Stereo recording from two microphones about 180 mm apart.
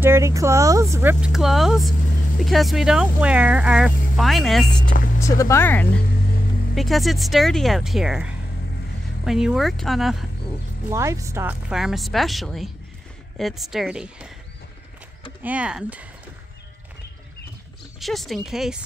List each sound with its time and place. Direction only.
0.0 s speech: 15° right (ahead or behind)
1.2 s speech: centre (ahead or behind)
4.8 s speech: 50° left (ahead or behind)
5.2 s speech: 15° left (ahead or behind)
6.7 s speech: centre (ahead or behind)
10.9 s speech: 15° right (ahead or behind)
11.7 s speech: centre (ahead or behind)
15.4 s speech: 5° right (ahead or behind)
17.9 s speech: centre (ahead or behind)